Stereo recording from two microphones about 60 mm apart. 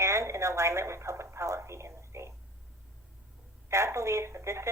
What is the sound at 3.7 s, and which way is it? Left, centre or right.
Speech, right.